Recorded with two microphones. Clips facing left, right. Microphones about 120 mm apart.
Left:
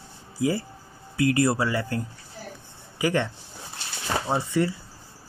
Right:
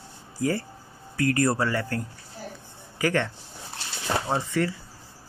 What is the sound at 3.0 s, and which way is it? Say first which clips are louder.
Speech: left 1 dB; 15° left (ahead or behind).